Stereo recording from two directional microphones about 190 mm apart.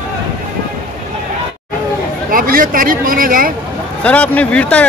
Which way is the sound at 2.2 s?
50° right (ahead or behind).